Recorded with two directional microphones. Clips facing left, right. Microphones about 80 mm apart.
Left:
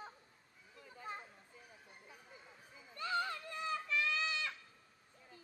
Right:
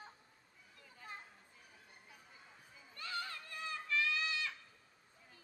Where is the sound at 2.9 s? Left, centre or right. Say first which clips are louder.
Left 6 dB; left.